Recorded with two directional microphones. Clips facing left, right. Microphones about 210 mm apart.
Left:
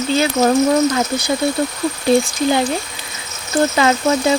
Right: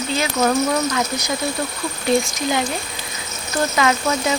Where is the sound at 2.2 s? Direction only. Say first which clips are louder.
Left 5 dB; 30° left (ahead or behind).